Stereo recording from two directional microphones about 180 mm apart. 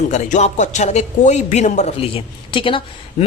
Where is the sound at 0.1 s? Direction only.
40° left (ahead or behind).